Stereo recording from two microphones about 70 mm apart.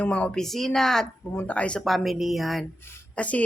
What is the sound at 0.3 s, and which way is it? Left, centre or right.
Speech, centre.